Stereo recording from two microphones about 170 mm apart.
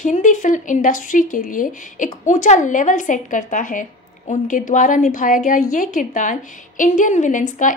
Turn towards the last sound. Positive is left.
turn(degrees=50)  # may be behind; listen again after turning